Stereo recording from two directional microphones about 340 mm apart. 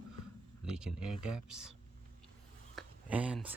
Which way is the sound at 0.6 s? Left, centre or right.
Centre.